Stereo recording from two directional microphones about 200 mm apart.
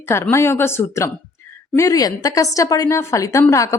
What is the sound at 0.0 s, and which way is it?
A woman's voice, 15° left (ahead or behind).